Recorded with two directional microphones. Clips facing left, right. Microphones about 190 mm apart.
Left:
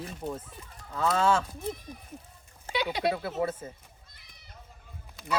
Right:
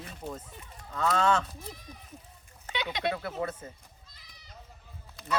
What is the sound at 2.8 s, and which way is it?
Speech, 10° left (ahead or behind).